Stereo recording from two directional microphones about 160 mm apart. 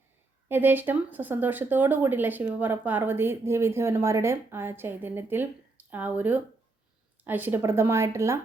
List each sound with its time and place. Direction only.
0.4 s speech: 10° right (ahead or behind)